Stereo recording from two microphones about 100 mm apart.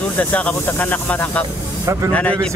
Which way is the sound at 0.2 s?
15° left (ahead or behind).